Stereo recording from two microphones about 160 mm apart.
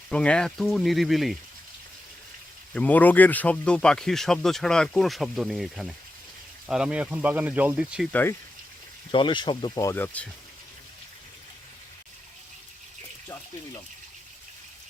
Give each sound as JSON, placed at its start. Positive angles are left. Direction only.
{"t": 0.1, "sound": "speech", "side_deg": 5}
{"t": 2.7, "sound": "speech", "side_deg": 10}
{"t": 8.1, "sound": "speech", "side_deg": 15}
{"t": 9.1, "sound": "speech", "side_deg": 30}